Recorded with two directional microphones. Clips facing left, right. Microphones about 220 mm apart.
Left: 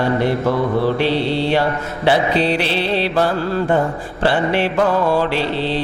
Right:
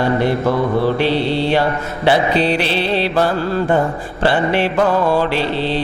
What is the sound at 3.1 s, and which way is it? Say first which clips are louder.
Mantra: right 1 dB; 25° right (ahead or behind).